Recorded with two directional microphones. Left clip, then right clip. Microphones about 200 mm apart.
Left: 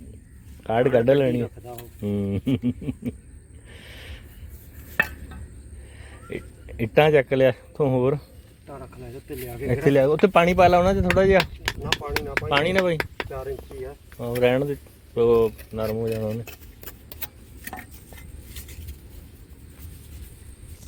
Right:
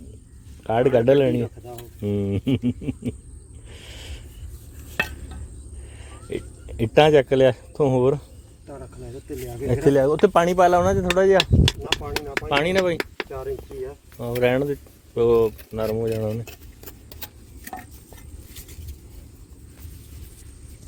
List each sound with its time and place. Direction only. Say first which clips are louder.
0.6 s a sound: right 1 dB; 10° right (ahead or behind)
4.9 s a sound: left 2 dB; 20° right (ahead or behind)
6.1 s speech: right 4 dB; 15° right (ahead or behind)
7.8 s a sound: right 3 dB; 10° right (ahead or behind)
9.8 s speech: right 1 dB; 5° left (ahead or behind)
11.3 s speech: right 2 dB; 20° right (ahead or behind)
12.5 s speech: right 1 dB; centre (ahead or behind)
13.0 s speech: even; 35° right (ahead or behind)
14.4 s speech: even; centre (ahead or behind)
15.7 s a sound: right 2 dB; 15° right (ahead or behind)
16.0 s speech: right 2 dB; 20° right (ahead or behind)
17.7 s chopping: right 1 dB; 10° right (ahead or behind)